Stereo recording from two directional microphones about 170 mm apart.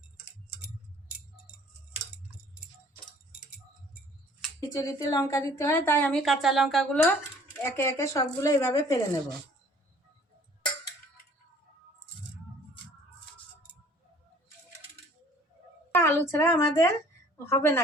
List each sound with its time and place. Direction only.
4.8 s a woman's voice: 20° left (ahead or behind); by 7.1 s centre (ahead or behind)
7.6 s a woman's voice: 15° left (ahead or behind)
15.9 s a woman's voice: 15° left (ahead or behind)